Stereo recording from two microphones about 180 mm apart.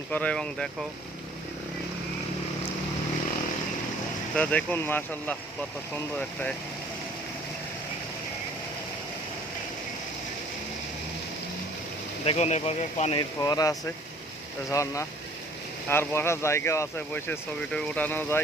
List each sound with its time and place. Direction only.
0.1 s speech: 5° left (ahead or behind)
4.4 s speech: 10° left (ahead or behind)
12.2 s speech: 35° left (ahead or behind)
13.4 s speech: 20° left (ahead or behind)